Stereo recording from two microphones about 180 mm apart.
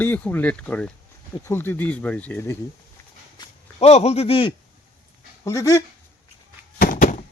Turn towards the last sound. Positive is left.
turn(degrees=50)  # may be behind; listen again after turning